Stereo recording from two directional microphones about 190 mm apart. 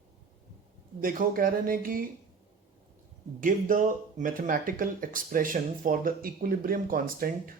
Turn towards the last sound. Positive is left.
turn(degrees=-50)  # may be behind; listen again after turning